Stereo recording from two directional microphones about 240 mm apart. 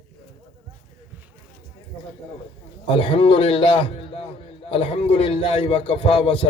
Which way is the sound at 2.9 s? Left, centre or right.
Left.